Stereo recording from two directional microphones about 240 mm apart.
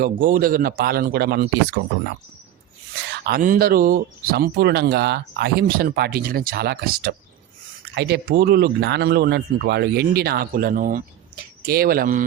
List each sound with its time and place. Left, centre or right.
0.0 s speech: right
3.1 s speech: right